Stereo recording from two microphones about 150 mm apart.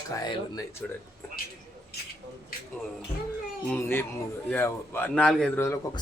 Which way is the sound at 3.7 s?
15° left (ahead or behind).